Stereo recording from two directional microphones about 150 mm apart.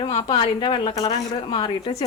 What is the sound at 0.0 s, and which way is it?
A woman's voice, 45° left (ahead or behind).